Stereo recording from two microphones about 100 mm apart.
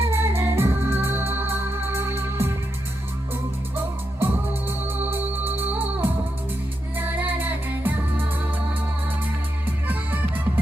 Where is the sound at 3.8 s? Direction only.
20° right (ahead or behind).